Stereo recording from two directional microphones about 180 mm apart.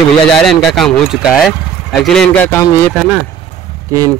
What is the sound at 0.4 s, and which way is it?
Speech, centre (ahead or behind).